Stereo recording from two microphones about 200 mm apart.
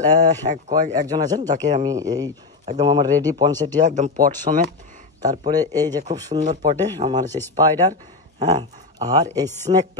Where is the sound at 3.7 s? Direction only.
40° right (ahead or behind).